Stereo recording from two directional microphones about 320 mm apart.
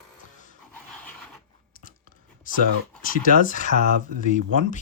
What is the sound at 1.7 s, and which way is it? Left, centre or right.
Whispering, left.